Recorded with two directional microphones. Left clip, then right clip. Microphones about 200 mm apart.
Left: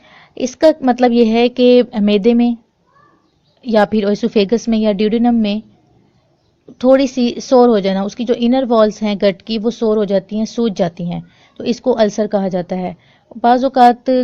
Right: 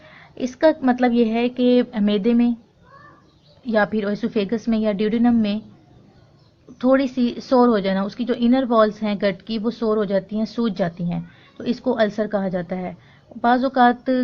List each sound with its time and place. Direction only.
0.0 s a sound: 40° left (ahead or behind)
0.8 s speech: 40° left (ahead or behind)
3.7 s speech: 40° left (ahead or behind)
6.7 s speech: 40° left (ahead or behind)